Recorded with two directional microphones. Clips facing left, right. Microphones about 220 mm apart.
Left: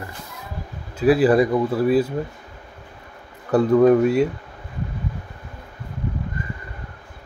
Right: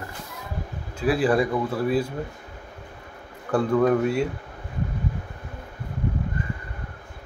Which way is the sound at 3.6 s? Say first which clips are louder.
Left 6 dB; 20° left (ahead or behind).